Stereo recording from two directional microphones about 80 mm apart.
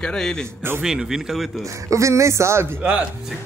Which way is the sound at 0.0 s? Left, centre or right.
Centre.